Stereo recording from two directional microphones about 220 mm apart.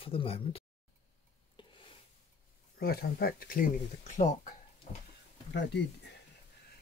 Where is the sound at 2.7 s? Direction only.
45° left (ahead or behind).